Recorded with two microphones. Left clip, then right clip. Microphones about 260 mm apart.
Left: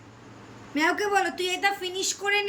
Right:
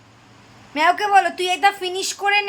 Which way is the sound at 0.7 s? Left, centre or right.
Centre.